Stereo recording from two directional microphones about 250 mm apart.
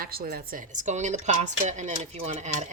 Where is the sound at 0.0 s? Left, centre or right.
Right.